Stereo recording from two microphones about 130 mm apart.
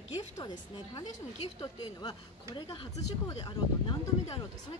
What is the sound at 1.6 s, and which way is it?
Speech, 30° left (ahead or behind).